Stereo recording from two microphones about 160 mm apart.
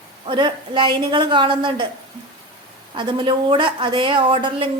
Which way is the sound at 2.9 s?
30° right (ahead or behind).